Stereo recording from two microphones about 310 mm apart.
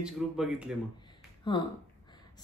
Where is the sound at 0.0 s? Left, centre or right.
Centre.